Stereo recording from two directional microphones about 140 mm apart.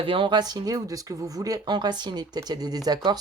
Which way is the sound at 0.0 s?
40° right (ahead or behind).